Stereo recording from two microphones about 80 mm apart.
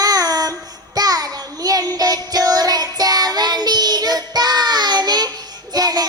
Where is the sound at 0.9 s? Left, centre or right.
Right.